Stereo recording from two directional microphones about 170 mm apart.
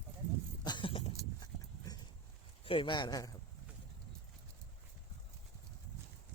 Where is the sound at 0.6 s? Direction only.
25° left (ahead or behind).